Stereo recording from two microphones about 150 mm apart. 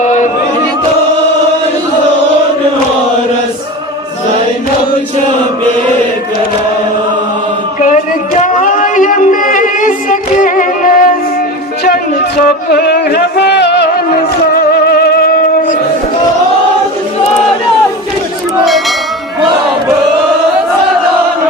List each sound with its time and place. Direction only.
0.0 s music: 55° left (ahead or behind)
7.8 s a sound: 55° left (ahead or behind)
12.4 s music: 90° left; by 15.8 s 70° left (ahead or behind)
18.6 s bell: centre (ahead or behind)